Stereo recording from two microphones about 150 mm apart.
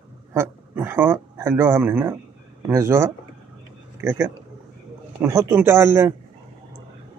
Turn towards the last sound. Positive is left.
turn(degrees=-15)  # may be behind; listen again after turning